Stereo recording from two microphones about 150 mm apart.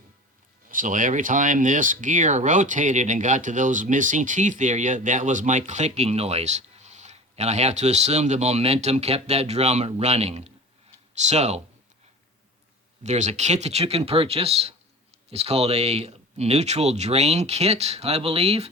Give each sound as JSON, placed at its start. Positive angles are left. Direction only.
{"t": 0.7, "sound": "speech", "side_deg": -60}
{"t": 13.0, "sound": "speech", "side_deg": -50}